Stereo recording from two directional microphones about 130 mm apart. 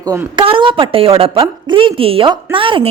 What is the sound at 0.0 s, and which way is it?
Speech, 25° right (ahead or behind).